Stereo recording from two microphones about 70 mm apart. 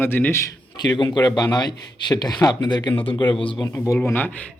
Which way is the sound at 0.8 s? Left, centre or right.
Left.